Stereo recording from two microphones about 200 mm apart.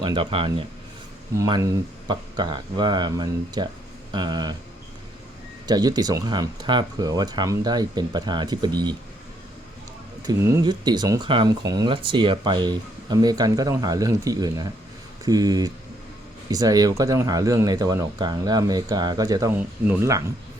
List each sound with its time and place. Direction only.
0.0 s speech: 25° right (ahead or behind)
5.6 s speech: 20° right (ahead or behind)
10.2 s speech: 15° right (ahead or behind)